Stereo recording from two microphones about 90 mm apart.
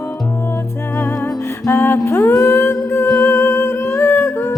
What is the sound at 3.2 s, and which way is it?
Humming, 25° left (ahead or behind).